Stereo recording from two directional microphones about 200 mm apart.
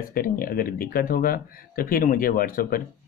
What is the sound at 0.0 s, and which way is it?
Speech, 45° left (ahead or behind).